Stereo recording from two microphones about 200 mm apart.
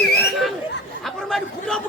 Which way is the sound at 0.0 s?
55° left (ahead or behind).